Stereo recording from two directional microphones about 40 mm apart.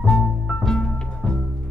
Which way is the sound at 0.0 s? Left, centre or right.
Centre.